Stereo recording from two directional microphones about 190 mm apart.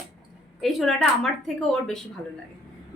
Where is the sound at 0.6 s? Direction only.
Centre (ahead or behind).